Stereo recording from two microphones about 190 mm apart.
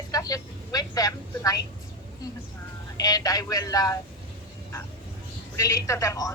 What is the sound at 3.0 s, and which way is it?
Speech, 20° left (ahead or behind).